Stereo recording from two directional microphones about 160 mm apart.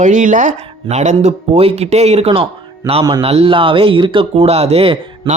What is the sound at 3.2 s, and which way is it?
Speech, 35° right (ahead or behind).